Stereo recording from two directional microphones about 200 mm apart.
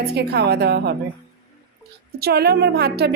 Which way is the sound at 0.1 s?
55° right (ahead or behind).